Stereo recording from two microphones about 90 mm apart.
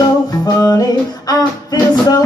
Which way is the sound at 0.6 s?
45° left (ahead or behind).